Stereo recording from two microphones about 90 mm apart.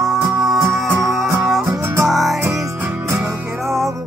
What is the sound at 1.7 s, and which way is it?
Music, 35° right (ahead or behind).